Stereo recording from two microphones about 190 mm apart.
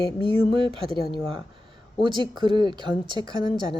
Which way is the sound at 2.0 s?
25° right (ahead or behind).